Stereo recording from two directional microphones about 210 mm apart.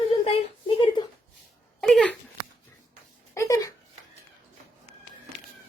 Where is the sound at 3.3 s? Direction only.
15° left (ahead or behind).